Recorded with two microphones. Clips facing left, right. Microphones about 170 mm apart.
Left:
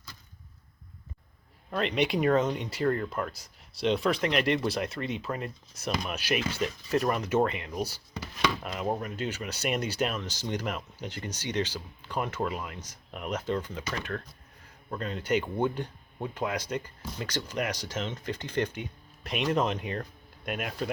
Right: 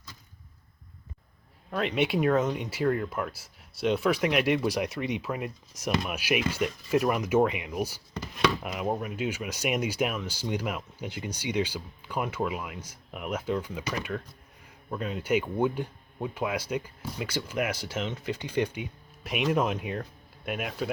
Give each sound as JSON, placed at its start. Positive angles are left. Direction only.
{"t": 1.7, "sound": "speech", "side_deg": -5}
{"t": 8.1, "sound": "chopping", "side_deg": 5}
{"t": 8.6, "sound": "speech", "side_deg": -10}